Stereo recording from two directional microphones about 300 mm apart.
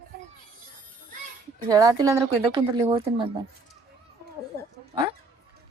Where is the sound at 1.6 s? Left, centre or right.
Centre.